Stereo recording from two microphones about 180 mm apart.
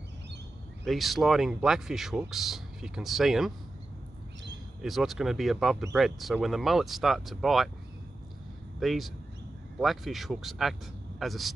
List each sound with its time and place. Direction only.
0.8 s speech: centre (ahead or behind)
4.8 s speech: centre (ahead or behind)
8.7 s speech: centre (ahead or behind)